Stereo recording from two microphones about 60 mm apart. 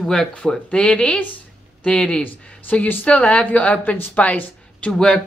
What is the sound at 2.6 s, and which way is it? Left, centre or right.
Speech, left.